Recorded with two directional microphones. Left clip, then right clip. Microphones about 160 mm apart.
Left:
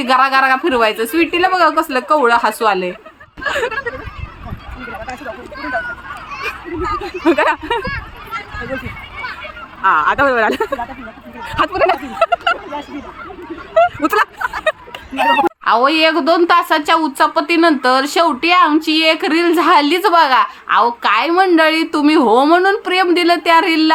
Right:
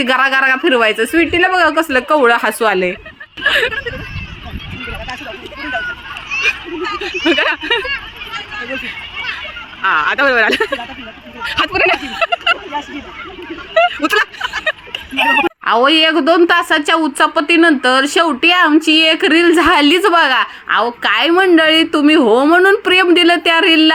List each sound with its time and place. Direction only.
0.0 s a woman's voice: 15° right (ahead or behind)
3.4 s a sound: centre (ahead or behind)
3.7 s a woman's voice: 10° right (ahead or behind)
6.3 s children playing: 25° left (ahead or behind)
7.3 s a sound: 5° left (ahead or behind)
8.5 s speech: 30° left (ahead or behind)
9.8 s speech: 5° left (ahead or behind)
11.7 s a woman's voice: 15° right (ahead or behind)
12.0 s speech: 5° left (ahead or behind)
13.7 s speech: 5° left (ahead or behind)
15.6 s a woman's voice: 20° right (ahead or behind)